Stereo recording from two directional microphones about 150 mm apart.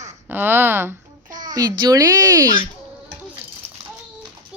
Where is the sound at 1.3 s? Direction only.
60° right (ahead or behind).